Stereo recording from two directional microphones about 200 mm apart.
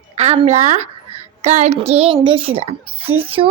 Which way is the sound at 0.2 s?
35° right (ahead or behind).